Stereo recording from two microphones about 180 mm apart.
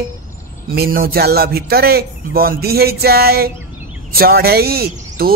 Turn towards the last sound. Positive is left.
turn(degrees=-55)  # may be behind; listen again after turning